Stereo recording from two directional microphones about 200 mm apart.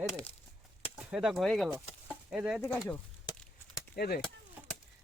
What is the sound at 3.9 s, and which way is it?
Speech, 50° left (ahead or behind).